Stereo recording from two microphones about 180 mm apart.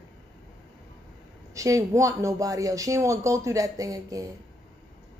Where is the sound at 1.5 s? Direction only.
20° right (ahead or behind).